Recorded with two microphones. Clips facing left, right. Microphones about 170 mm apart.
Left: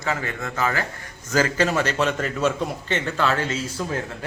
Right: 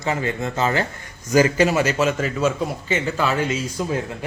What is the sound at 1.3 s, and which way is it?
A man's voice, 15° right (ahead or behind).